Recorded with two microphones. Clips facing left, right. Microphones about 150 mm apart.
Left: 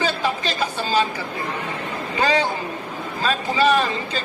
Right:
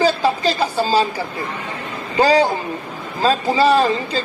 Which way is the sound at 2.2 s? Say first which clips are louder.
Right 6 dB; 35° right (ahead or behind).